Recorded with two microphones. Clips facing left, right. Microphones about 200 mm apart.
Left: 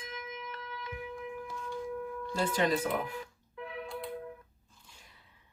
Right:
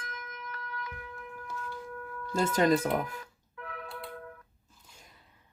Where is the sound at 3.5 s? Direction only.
25° left (ahead or behind).